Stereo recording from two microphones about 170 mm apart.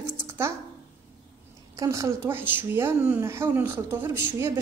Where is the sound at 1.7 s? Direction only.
20° right (ahead or behind).